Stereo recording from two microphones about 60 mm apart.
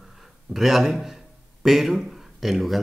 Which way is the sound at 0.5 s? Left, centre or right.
Centre.